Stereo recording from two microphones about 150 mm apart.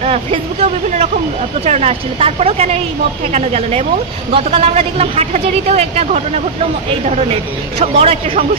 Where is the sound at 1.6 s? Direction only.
45° right (ahead or behind).